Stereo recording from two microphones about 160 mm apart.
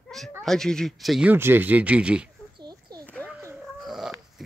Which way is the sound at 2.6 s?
25° right (ahead or behind).